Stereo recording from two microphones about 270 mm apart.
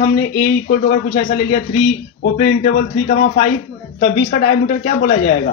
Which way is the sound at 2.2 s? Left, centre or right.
Left.